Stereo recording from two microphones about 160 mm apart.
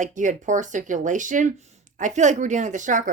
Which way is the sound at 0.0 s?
50° right (ahead or behind).